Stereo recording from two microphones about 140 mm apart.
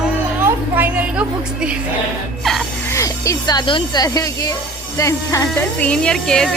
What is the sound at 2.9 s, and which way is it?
Speech, 20° left (ahead or behind).